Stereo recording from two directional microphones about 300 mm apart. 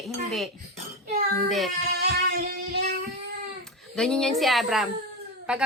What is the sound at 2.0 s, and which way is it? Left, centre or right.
Music, right.